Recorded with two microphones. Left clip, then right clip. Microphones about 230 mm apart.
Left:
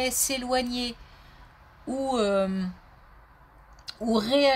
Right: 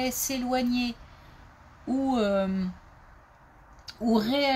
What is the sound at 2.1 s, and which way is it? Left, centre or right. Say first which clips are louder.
Speech: left 2 dB; left.